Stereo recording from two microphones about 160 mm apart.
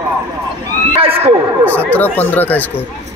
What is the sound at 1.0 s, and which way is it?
Neigh, 35° right (ahead or behind).